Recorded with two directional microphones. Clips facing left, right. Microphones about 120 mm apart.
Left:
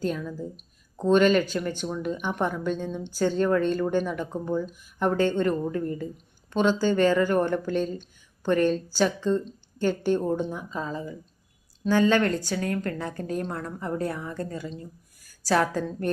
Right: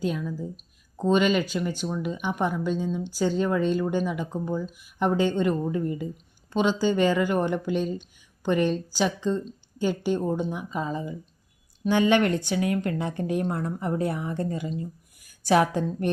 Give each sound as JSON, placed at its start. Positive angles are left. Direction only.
{"t": 0.0, "sound": "a woman's voice", "side_deg": -10}